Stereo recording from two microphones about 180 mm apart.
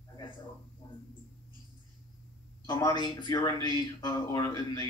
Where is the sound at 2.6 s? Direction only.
25° left (ahead or behind).